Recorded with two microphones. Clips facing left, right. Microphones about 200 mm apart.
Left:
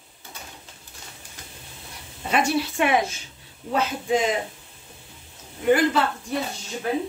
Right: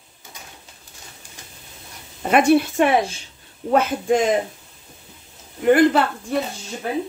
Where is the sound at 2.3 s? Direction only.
55° right (ahead or behind).